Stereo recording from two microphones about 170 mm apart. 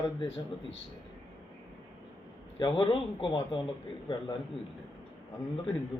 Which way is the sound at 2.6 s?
30° left (ahead or behind).